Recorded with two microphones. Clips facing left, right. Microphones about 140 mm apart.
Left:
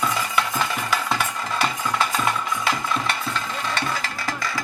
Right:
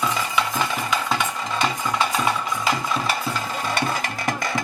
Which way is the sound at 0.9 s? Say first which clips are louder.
Right 1 dB; 5° left (ahead or behind).